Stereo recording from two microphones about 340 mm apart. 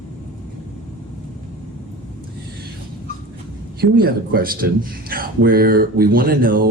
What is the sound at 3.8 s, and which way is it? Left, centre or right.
Speech, right.